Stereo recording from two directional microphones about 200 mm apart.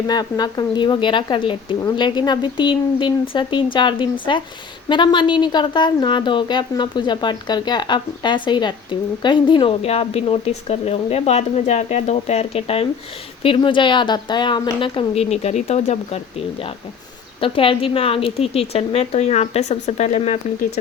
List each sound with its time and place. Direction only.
0.1 s speech: 20° left (ahead or behind)